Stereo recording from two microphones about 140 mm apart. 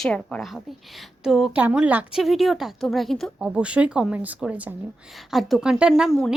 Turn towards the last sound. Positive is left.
turn(degrees=0)  # may be behind; listen again after turning